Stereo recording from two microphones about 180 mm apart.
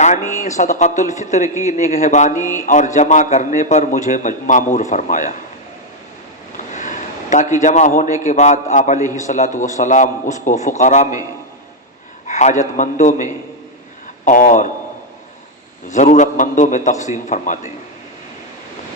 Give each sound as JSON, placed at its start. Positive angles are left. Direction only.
{"t": 0.4, "sound": "a man's voice", "side_deg": 40}
{"t": 2.3, "sound": "a sound", "side_deg": -15}
{"t": 2.6, "sound": "a man's voice", "side_deg": 45}
{"t": 6.7, "sound": "a sound", "side_deg": 45}
{"t": 8.3, "sound": "a man's voice", "side_deg": 40}
{"t": 12.2, "sound": "a man's voice", "side_deg": 40}
{"t": 15.9, "sound": "a man's voice", "side_deg": 40}